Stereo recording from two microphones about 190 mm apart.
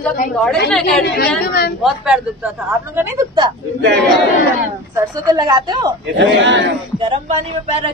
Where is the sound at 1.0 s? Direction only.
55° left (ahead or behind).